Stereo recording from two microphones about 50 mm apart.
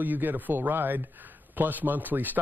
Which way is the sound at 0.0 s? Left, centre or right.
Right.